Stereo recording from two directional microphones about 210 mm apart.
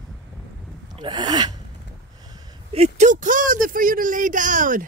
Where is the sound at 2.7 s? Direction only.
35° right (ahead or behind).